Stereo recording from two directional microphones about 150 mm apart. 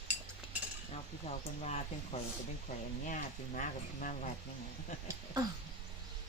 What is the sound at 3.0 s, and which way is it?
Speech, 60° left (ahead or behind).